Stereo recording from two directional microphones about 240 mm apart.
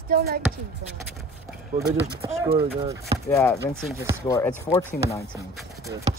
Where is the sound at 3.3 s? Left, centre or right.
Centre.